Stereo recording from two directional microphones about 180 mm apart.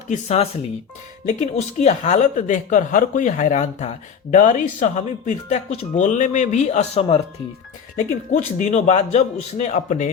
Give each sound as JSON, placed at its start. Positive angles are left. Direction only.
{"t": 0.1, "sound": "speech", "side_deg": 35}
{"t": 8.3, "sound": "speech", "side_deg": 40}